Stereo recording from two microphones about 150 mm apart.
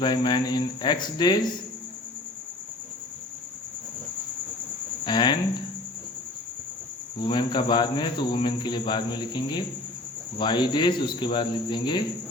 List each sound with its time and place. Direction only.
0.0 s speech: 30° left (ahead or behind)
5.0 s speech: 30° left (ahead or behind)
7.2 s speech: 30° left (ahead or behind)